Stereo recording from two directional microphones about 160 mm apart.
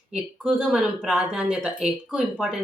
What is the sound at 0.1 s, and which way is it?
Speech, 5° right (ahead or behind).